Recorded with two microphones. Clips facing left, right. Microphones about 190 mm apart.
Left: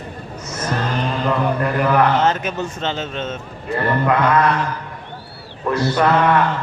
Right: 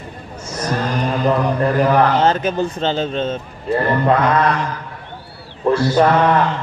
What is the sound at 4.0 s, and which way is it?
Mantra, 30° right (ahead or behind).